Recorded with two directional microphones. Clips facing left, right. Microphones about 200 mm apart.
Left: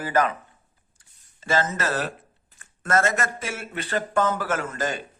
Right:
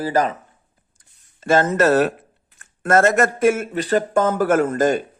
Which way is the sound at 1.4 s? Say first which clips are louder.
Right 9 dB; 60° right (ahead or behind).